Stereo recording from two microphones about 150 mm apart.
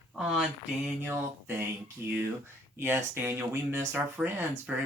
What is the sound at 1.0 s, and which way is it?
Speech, 15° right (ahead or behind).